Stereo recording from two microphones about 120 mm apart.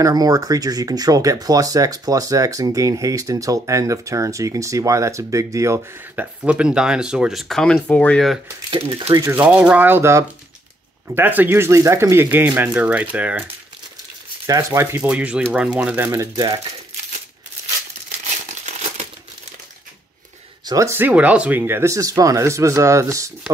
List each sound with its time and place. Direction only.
0.0 s speech: 30° right (ahead or behind)
6.1 s speech: 10° right (ahead or behind); by 8.3 s 10° left (ahead or behind)
8.6 s speech: 45° right (ahead or behind)
9.3 s speech: 10° right (ahead or behind)
14.4 s speech: 25° right (ahead or behind)
16.3 s speech: 30° right (ahead or behind)
18.7 s crumpling: 70° right (ahead or behind)
20.6 s speech: 25° right (ahead or behind)